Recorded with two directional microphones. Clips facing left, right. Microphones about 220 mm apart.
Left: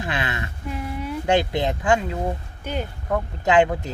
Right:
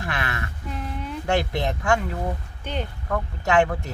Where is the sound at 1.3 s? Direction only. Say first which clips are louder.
Left 3 dB; 20° left (ahead or behind).